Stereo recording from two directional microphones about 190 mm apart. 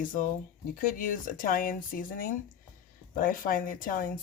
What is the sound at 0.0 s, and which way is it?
Speech, 45° left (ahead or behind).